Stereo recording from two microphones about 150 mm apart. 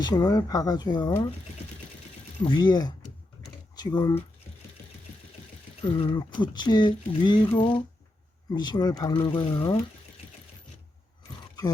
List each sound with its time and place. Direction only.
0.0 s speech: 30° left (ahead or behind)
2.4 s speech: 30° left (ahead or behind)
5.8 s speech: 30° left (ahead or behind)